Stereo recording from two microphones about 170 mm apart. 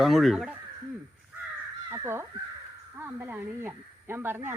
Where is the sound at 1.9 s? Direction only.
15° right (ahead or behind).